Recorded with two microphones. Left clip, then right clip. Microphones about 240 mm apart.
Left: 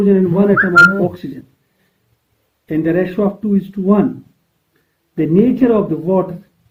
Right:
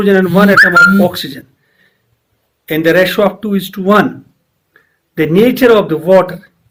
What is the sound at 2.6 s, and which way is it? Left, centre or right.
Speech, centre.